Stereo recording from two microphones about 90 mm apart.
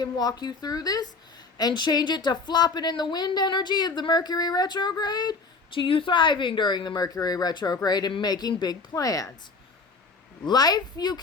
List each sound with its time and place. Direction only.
0.0 s speech: 50° left (ahead or behind)
5.7 s a woman's voice: 70° left (ahead or behind); by 9.3 s 40° left (ahead or behind)
10.4 s speech: 50° left (ahead or behind)